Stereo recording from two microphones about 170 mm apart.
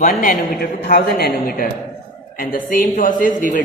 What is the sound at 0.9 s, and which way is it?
A man's voice, 60° left (ahead or behind).